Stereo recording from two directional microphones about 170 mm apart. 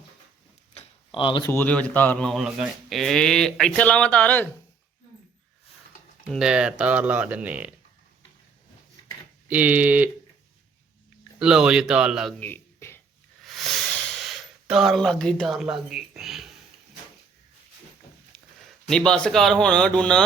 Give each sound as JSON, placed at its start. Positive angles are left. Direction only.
{"t": 0.7, "sound": "tick-tock", "side_deg": 35}
{"t": 1.5, "sound": "speech", "side_deg": 10}
{"t": 6.2, "sound": "speech", "side_deg": 0}
{"t": 9.5, "sound": "speech", "side_deg": -10}
{"t": 11.3, "sound": "a man's voice", "side_deg": -5}
{"t": 12.4, "sound": "a sound", "side_deg": 10}
{"t": 13.4, "sound": "a sound", "side_deg": 0}
{"t": 18.9, "sound": "a man's voice", "side_deg": 5}